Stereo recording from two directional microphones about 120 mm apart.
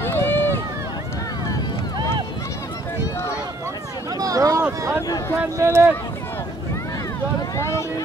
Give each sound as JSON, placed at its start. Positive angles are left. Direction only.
{"t": 0.0, "sound": "run", "side_deg": 20}
{"t": 4.2, "sound": "a sound", "side_deg": -30}
{"t": 5.6, "sound": "speech", "side_deg": -25}
{"t": 7.5, "sound": "boat", "side_deg": 25}